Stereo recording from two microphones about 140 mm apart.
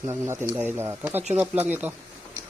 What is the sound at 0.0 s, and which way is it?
Speech, 20° right (ahead or behind).